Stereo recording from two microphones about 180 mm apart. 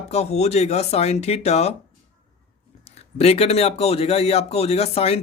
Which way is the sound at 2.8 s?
35° left (ahead or behind).